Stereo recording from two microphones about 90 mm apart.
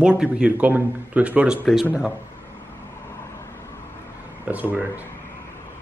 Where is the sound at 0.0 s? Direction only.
10° right (ahead or behind).